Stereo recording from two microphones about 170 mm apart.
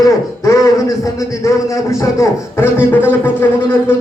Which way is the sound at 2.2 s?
15° left (ahead or behind).